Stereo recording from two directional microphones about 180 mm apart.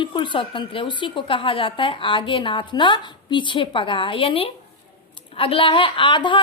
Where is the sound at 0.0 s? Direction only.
25° left (ahead or behind).